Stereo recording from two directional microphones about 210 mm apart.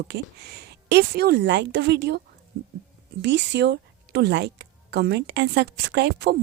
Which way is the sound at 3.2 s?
55° right (ahead or behind).